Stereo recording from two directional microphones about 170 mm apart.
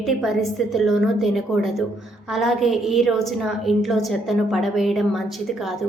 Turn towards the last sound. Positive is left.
turn(degrees=0)  # may be behind; listen again after turning